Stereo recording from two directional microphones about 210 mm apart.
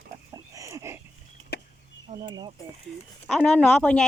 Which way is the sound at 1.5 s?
50° left (ahead or behind).